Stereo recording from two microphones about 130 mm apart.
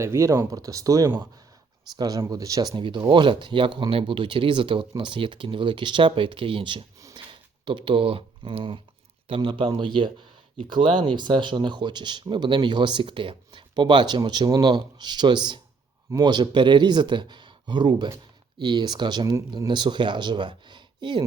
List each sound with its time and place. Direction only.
0.0 s speech: 20° right (ahead or behind); by 21.2 s 35° right (ahead or behind)